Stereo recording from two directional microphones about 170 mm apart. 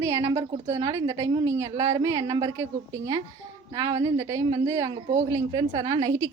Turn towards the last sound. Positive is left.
turn(degrees=-20)  # may be behind; listen again after turning